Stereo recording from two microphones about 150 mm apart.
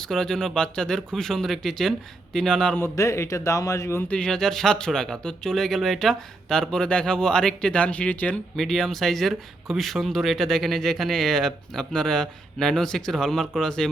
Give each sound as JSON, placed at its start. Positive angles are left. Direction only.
{"t": 0.0, "sound": "speech", "side_deg": 5}
{"t": 2.8, "sound": "a man's voice", "side_deg": 20}
{"t": 4.2, "sound": "speech", "side_deg": 5}